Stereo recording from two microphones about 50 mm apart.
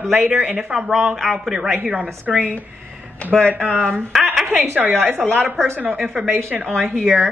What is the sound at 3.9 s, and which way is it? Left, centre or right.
Speech, centre.